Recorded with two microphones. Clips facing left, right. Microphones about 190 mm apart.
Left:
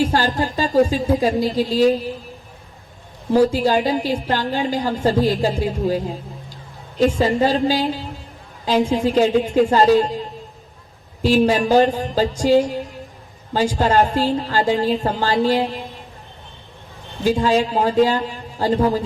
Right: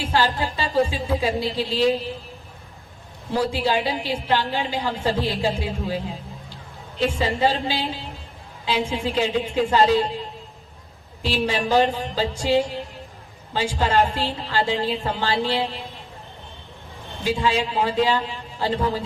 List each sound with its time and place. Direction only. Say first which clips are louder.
0.0 s a woman's voice: left 4 dB; 45° left (ahead or behind)
3.3 s a woman's voice: left 7 dB; 45° left (ahead or behind)
11.2 s a woman's voice: left 8 dB; 45° left (ahead or behind)
12.4 s music: left 5 dB; 40° left (ahead or behind)
13.5 s a woman's voice: left 5 dB; 45° left (ahead or behind)
17.2 s a woman's voice: left 5 dB; 45° left (ahead or behind)